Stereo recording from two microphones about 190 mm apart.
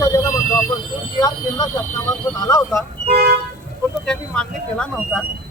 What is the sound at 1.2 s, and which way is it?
Speech, 20° left (ahead or behind).